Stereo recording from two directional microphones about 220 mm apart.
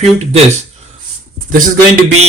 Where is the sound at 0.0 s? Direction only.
30° right (ahead or behind).